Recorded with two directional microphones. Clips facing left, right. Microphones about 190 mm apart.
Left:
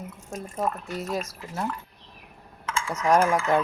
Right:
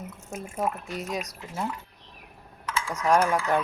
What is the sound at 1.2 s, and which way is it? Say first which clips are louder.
Speech: left 1 dB; 15° right (ahead or behind).